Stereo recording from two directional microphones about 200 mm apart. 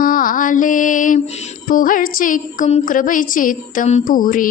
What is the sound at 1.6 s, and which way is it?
Speech, 45° left (ahead or behind).